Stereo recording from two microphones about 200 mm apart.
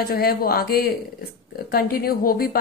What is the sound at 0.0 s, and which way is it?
A woman's voice, 50° left (ahead or behind).